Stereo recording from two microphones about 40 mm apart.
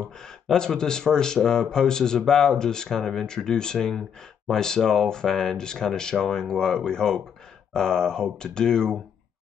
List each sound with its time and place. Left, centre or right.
0.2 s speech: centre